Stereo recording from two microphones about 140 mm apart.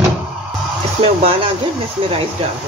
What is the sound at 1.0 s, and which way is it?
Speech, 40° right (ahead or behind).